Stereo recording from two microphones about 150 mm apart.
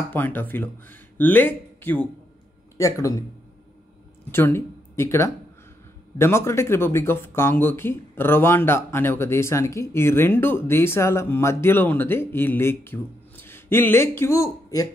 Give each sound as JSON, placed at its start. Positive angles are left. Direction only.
{"t": 0.1, "sound": "speech", "side_deg": 10}
{"t": 4.3, "sound": "speech", "side_deg": 15}